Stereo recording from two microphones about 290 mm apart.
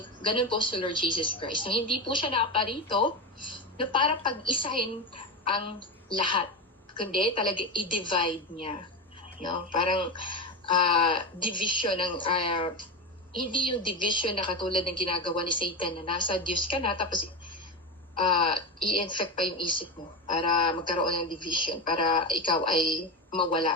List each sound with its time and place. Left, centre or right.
0.2 s a woman's voice: centre
9.7 s a woman's voice: centre
18.2 s a sound: centre
18.9 s a woman's voice: centre